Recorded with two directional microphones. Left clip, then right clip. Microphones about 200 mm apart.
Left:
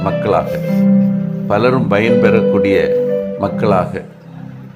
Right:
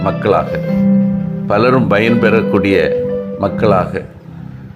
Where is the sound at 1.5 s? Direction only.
10° right (ahead or behind).